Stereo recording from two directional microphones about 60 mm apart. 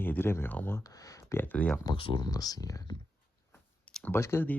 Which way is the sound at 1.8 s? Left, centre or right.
Left.